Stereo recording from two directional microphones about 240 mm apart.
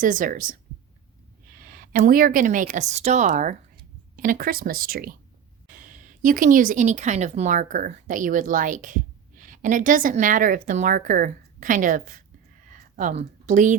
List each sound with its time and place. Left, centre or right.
0.0 s speech: right
1.6 s speech: right
12.7 s a sound: right